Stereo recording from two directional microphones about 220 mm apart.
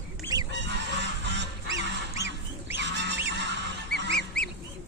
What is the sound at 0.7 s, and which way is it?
Goose, 50° right (ahead or behind).